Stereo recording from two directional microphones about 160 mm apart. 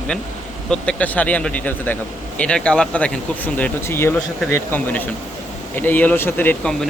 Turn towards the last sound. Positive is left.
turn(degrees=10)  # may be behind; listen again after turning